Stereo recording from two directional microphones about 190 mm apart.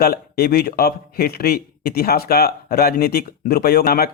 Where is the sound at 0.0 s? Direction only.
55° left (ahead or behind).